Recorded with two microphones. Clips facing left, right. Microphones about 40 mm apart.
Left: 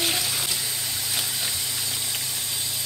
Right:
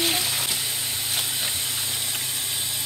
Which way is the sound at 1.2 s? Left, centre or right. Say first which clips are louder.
Right 1 dB; right.